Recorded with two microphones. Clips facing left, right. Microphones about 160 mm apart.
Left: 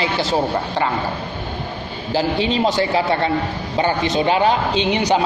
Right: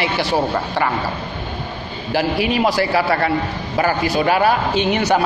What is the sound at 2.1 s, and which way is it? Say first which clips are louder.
A man's voice: even; 25° left (ahead or behind).